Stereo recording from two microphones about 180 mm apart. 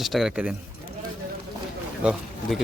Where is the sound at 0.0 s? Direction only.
Centre (ahead or behind).